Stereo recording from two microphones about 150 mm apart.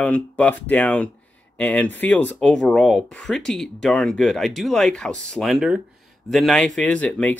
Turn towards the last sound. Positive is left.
turn(degrees=10)  # may be behind; listen again after turning